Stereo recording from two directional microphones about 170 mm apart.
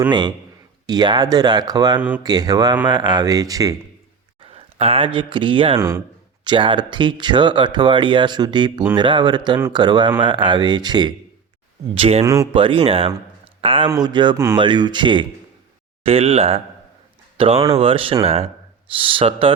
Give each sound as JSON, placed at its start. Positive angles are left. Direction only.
{"t": 0.1, "sound": "speech", "side_deg": -25}
{"t": 2.0, "sound": "speech", "side_deg": -10}
{"t": 2.2, "sound": "speech", "side_deg": -25}
{"t": 4.4, "sound": "speech", "side_deg": -35}
{"t": 12.2, "sound": "speech", "side_deg": -20}
{"t": 12.5, "sound": "speech", "side_deg": -30}